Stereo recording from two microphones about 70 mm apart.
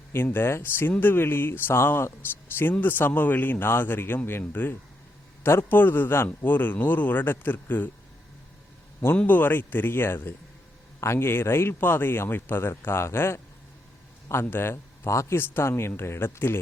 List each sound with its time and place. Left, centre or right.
0.1 s speech: left
9.1 s speech: left
14.4 s speech: left
15.0 s speech: left